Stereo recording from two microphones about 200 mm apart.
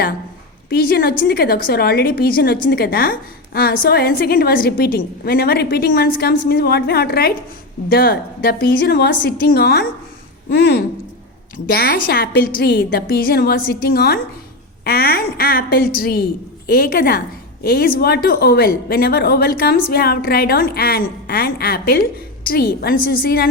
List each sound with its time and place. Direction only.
0.7 s a woman's voice: 50° left (ahead or behind)
11.5 s a woman's voice: 50° left (ahead or behind)